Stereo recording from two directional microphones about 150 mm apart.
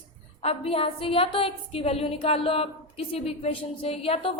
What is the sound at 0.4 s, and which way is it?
A woman's voice, 40° left (ahead or behind).